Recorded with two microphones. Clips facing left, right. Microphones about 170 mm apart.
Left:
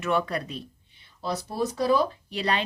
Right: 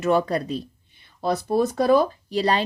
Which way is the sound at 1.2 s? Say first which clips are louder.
Right 7 dB; 55° right (ahead or behind).